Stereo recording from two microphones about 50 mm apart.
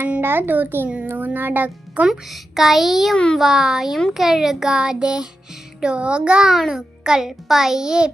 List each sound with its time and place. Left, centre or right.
0.2 s a child's voice: right
2.0 s a child's voice: centre